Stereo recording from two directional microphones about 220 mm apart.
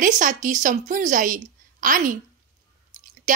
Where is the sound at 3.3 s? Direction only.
35° right (ahead or behind).